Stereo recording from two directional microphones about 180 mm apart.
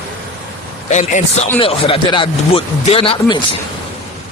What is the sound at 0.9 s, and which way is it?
Speech, 40° left (ahead or behind).